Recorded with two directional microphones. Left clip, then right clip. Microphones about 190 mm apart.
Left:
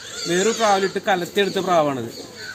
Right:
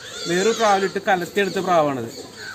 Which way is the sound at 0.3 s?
5° right (ahead or behind).